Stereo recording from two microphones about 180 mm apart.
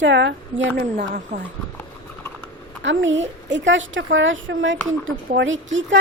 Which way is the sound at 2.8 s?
90° right.